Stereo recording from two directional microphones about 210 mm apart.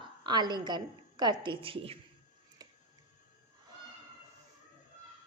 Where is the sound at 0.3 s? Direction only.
20° right (ahead or behind).